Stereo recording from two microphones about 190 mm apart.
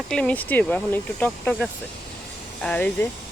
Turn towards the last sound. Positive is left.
turn(degrees=10)  # may be behind; listen again after turning